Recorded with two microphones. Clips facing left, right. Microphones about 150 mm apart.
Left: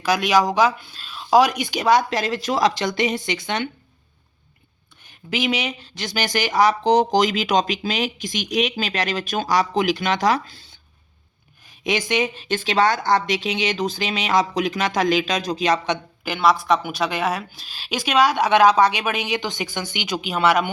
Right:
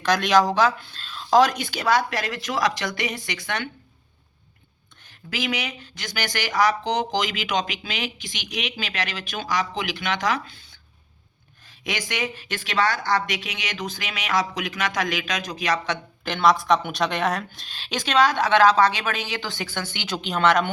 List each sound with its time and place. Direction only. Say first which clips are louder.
0.0 s speech: left 1 dB; 10° left (ahead or behind)
5.0 s a woman's voice: left 5 dB; 20° left (ahead or behind)
6.8 s speech: left 8 dB; 35° left (ahead or behind)
11.8 s a woman's voice: left 7 dB; 20° left (ahead or behind)
16.2 s speech: left 1 dB; 5° left (ahead or behind)